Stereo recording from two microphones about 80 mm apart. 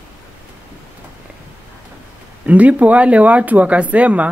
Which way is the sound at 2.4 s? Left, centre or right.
Centre.